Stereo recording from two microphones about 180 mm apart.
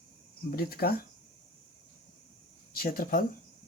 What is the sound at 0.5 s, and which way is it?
Speech, 60° left (ahead or behind).